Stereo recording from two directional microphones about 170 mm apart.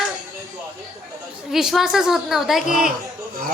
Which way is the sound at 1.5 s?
Centre (ahead or behind).